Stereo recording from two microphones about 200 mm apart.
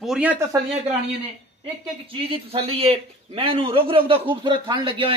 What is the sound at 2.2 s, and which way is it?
A man's voice, 30° right (ahead or behind).